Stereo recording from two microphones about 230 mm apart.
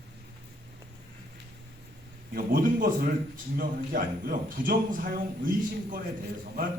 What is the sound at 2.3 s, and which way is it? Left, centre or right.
A man's voice, right.